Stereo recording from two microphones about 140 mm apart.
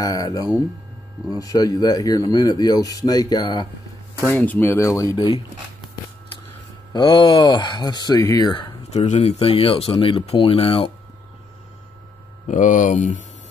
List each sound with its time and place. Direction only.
0.0 s speech: 25° left (ahead or behind)
4.3 s speech: 10° left (ahead or behind); by 5.3 s 30° left (ahead or behind)
6.9 s speech: 35° left (ahead or behind)
8.9 s speech: 55° left (ahead or behind)
12.4 s speech: 70° left (ahead or behind)